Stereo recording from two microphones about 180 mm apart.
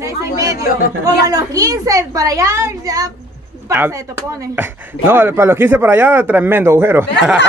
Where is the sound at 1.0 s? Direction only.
20° right (ahead or behind).